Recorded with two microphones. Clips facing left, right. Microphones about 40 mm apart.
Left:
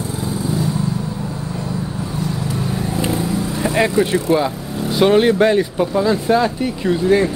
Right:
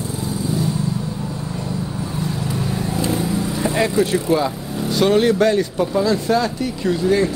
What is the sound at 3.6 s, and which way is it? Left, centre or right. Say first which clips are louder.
Speech: left 2 dB; centre.